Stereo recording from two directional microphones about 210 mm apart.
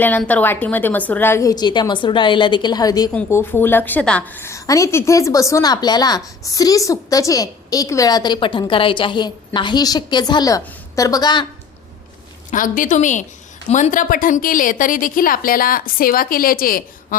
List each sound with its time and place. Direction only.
0.0 s a woman's voice: 5° left (ahead or behind)
12.5 s a woman's voice: 40° left (ahead or behind)